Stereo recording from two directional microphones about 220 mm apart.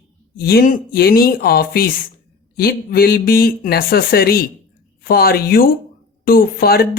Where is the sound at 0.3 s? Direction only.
45° left (ahead or behind).